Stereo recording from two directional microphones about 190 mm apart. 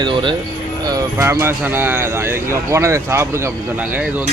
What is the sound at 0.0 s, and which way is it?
Speech, 25° right (ahead or behind).